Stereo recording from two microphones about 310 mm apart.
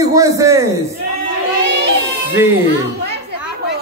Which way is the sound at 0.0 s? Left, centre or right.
Centre.